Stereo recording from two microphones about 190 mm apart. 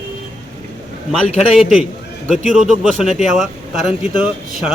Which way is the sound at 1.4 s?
Centre (ahead or behind).